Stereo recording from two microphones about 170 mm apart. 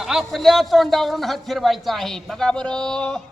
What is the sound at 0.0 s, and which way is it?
A man's voice, centre (ahead or behind).